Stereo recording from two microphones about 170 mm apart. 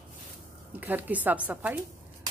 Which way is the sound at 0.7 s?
10° right (ahead or behind).